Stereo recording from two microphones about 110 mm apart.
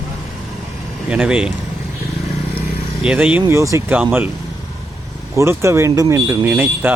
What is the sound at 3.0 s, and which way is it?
Speech, 10° right (ahead or behind).